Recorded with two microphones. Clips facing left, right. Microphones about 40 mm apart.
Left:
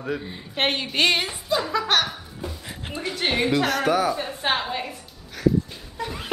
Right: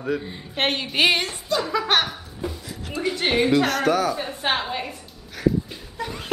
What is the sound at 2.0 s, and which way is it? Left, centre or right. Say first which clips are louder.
Laughter: right 2 dB; centre.